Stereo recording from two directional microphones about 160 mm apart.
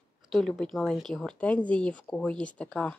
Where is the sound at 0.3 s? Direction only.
5° left (ahead or behind).